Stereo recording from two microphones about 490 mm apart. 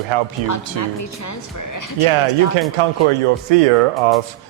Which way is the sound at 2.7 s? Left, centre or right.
Right.